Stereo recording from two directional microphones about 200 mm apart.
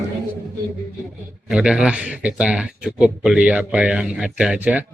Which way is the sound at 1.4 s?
5° right (ahead or behind).